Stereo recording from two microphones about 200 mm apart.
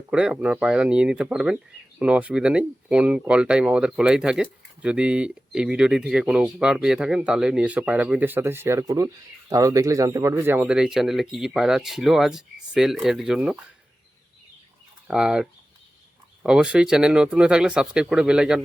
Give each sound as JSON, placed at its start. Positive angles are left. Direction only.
{"t": 0.1, "sound": "speech", "side_deg": -5}
{"t": 15.0, "sound": "speech", "side_deg": -5}